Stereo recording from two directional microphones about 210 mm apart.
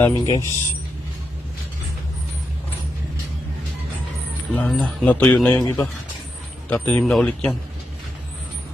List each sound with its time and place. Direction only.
0.0 s speech: 15° left (ahead or behind)
4.5 s speech: 5° left (ahead or behind)
5.5 s speech: 15° left (ahead or behind)
6.7 s speech: 5° left (ahead or behind)